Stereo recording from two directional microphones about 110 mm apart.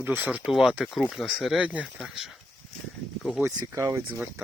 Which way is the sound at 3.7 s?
25° right (ahead or behind).